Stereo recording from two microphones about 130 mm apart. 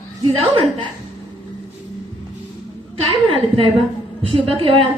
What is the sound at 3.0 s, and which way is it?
A woman's voice, 45° right (ahead or behind).